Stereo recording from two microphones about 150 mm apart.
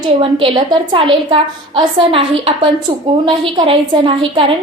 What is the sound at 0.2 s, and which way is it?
A woman's voice, 35° right (ahead or behind).